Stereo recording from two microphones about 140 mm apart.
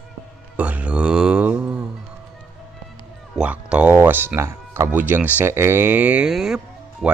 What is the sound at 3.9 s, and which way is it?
Speech, 15° right (ahead or behind).